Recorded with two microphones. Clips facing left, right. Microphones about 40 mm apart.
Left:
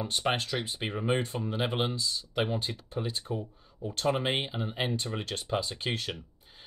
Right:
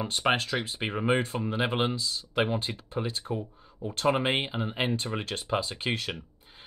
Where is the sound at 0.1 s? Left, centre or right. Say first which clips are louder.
Right 4 dB; centre.